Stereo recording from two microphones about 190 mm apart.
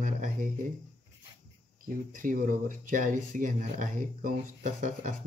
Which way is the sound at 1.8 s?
45° right (ahead or behind).